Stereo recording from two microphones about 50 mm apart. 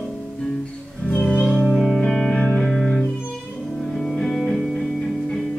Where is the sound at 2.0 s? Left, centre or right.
Centre.